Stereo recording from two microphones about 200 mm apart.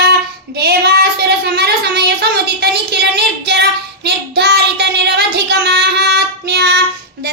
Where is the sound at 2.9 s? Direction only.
55° right (ahead or behind).